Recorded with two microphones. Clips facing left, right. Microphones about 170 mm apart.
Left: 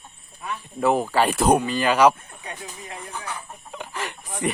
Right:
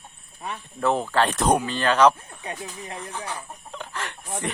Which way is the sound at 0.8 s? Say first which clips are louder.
Left 2 dB; 10° left (ahead or behind).